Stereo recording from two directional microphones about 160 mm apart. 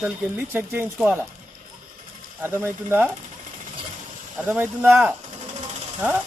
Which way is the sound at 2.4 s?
15° right (ahead or behind).